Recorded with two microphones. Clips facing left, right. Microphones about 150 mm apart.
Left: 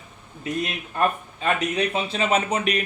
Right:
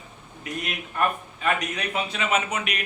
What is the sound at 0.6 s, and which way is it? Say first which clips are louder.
A man's voice: left 2 dB; 30° left (ahead or behind).